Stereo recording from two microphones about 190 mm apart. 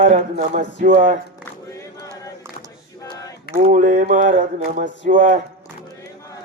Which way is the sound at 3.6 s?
45° right (ahead or behind).